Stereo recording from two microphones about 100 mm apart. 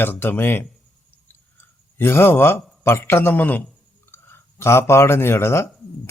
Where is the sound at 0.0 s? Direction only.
20° left (ahead or behind).